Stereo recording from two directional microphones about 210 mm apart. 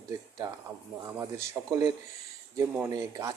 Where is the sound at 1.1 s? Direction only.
15° right (ahead or behind).